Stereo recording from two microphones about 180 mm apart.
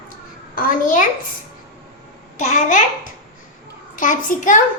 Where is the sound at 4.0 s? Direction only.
45° left (ahead or behind).